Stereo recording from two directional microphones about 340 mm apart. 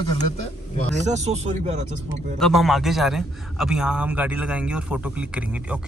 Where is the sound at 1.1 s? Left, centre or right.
Centre.